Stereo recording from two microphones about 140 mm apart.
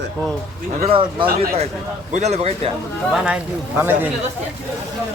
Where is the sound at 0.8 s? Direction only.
40° right (ahead or behind).